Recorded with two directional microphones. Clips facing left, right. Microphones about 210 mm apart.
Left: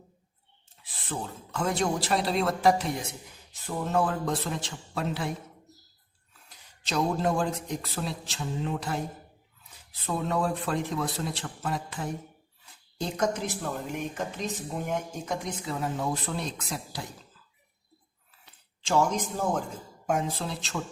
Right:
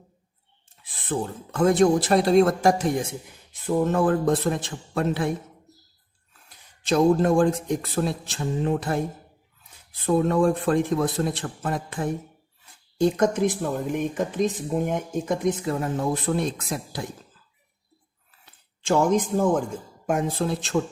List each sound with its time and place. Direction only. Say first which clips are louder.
1.0 s speech: right 8 dB; 50° right (ahead or behind)
6.8 s speech: right 8 dB; 50° right (ahead or behind)
10.2 s speech: right 8 dB; 50° right (ahead or behind)
18.9 s speech: right 5 dB; 55° right (ahead or behind)